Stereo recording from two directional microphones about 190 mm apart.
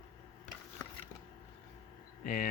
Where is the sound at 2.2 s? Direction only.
45° left (ahead or behind).